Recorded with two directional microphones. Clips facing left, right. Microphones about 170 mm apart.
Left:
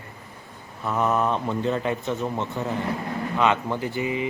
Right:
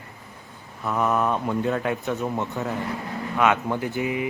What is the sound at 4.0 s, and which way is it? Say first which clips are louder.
Speech: left 1 dB; 70° right (ahead or behind).